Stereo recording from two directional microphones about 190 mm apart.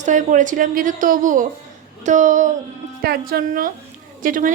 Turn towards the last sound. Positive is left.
turn(degrees=-45)  # may be behind; listen again after turning